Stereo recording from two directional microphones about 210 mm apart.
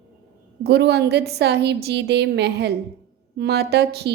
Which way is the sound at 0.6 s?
50° right (ahead or behind).